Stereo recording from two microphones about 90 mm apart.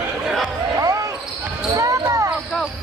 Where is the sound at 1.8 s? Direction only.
40° right (ahead or behind).